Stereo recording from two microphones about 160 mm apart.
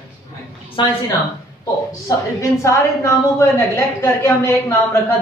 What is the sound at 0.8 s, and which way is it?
Speech, 30° left (ahead or behind).